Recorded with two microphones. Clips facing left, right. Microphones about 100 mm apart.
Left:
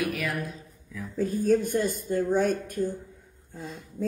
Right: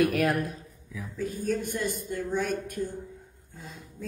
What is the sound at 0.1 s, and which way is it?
Speech, 55° right (ahead or behind).